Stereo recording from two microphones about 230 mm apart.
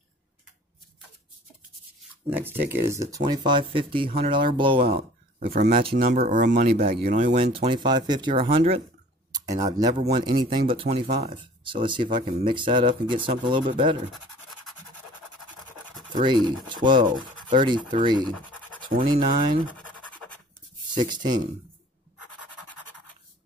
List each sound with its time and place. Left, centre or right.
2.2 s speech: centre
4.8 s speech: right
16.1 s speech: right
19.7 s scratch: centre
20.9 s speech: centre